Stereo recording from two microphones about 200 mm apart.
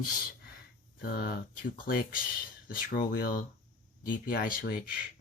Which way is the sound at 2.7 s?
45° left (ahead or behind).